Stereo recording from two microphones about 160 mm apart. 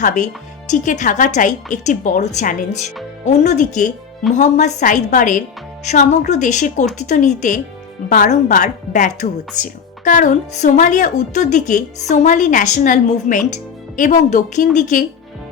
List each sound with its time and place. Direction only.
0.0 s speech: 50° left (ahead or behind)